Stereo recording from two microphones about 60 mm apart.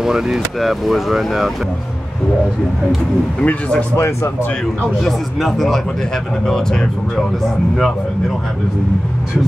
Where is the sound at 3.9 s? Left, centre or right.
Left.